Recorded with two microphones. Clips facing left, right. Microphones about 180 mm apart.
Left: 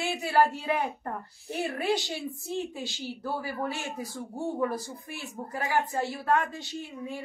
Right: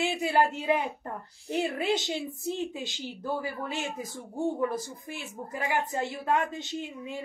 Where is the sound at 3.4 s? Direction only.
15° right (ahead or behind).